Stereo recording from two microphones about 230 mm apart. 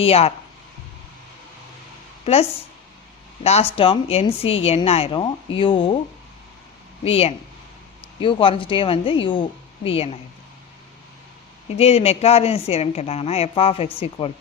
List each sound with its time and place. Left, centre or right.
0.0 s a woman's voice: left
2.2 s a woman's voice: left
7.0 s a woman's voice: left
11.8 s a woman's voice: left